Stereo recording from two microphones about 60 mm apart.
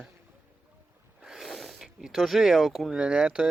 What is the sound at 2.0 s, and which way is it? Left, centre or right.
Speech, centre.